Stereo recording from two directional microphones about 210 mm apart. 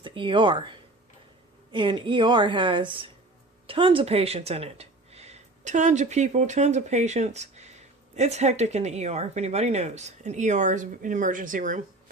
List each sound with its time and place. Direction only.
0.0 s a woman's voice: 25° right (ahead or behind); by 11.8 s 40° right (ahead or behind)